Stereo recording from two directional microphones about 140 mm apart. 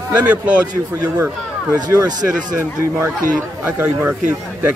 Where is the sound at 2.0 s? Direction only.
30° right (ahead or behind).